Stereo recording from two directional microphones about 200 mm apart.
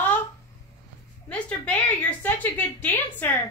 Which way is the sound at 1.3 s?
5° left (ahead or behind).